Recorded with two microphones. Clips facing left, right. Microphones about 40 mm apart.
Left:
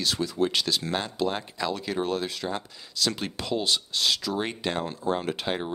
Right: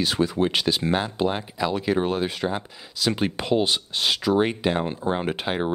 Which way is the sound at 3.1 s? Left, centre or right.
Right.